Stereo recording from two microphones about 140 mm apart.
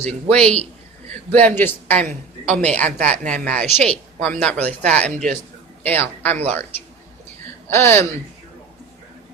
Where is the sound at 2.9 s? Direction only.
65° right (ahead or behind).